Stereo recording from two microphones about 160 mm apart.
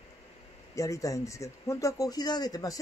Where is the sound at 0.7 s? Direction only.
20° left (ahead or behind).